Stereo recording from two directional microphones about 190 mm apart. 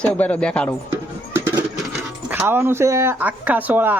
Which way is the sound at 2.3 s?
10° right (ahead or behind).